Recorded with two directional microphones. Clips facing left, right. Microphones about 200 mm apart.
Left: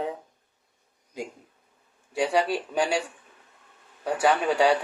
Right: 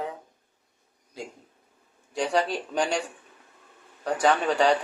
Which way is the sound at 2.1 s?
5° left (ahead or behind).